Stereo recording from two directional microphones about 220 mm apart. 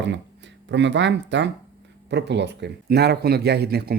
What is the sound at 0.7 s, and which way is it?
Speech, 55° right (ahead or behind).